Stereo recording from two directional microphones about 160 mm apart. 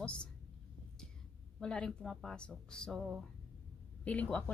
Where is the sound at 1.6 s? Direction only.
5° left (ahead or behind).